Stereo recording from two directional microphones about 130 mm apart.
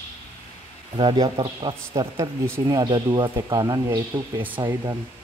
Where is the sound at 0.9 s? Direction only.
40° right (ahead or behind).